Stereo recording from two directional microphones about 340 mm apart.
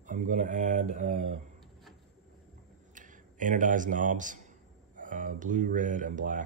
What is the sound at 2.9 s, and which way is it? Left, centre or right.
Speech, right.